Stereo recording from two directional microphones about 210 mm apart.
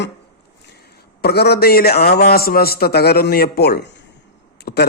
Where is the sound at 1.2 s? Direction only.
50° left (ahead or behind).